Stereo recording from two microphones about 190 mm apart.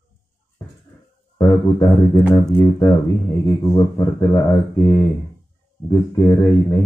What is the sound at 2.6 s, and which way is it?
Speech, 20° left (ahead or behind).